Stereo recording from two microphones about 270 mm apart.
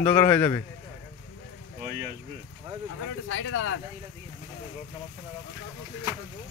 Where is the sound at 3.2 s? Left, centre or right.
Left.